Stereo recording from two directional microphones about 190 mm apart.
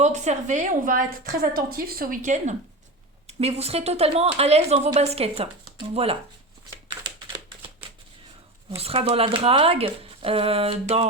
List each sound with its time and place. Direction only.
0.0 s a woman's voice: 40° right (ahead or behind)
8.8 s speech: 30° right (ahead or behind)